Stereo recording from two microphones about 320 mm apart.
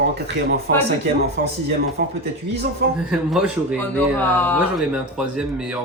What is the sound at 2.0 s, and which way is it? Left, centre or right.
Speech, right.